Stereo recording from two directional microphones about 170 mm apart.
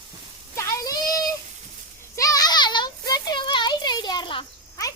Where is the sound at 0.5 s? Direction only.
20° left (ahead or behind).